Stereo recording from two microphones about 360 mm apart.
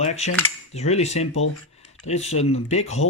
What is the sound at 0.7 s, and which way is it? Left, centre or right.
Speech, centre.